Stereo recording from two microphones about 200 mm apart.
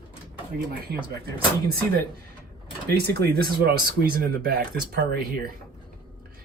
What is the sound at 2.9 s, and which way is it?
Speech, 50° right (ahead or behind).